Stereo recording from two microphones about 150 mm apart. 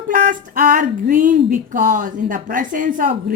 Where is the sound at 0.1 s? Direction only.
60° right (ahead or behind).